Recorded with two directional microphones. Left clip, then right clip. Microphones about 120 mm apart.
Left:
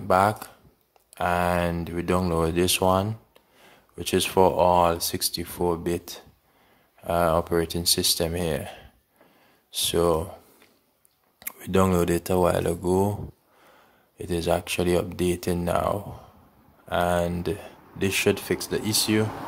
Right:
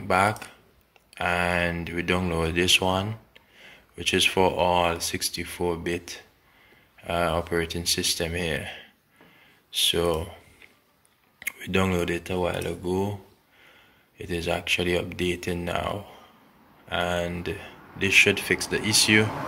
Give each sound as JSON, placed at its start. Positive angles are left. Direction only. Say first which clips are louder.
{"t": 0.1, "sound": "speech", "louder": "left 2 dB", "side_deg": 30}
{"t": 14.1, "sound": "speech", "louder": "left 3 dB", "side_deg": 40}